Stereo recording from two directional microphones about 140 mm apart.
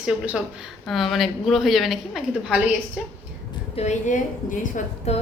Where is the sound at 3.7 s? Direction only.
55° left (ahead or behind).